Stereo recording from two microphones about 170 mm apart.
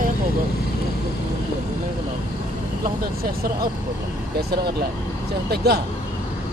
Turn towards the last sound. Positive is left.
turn(degrees=-70)  # may be behind; listen again after turning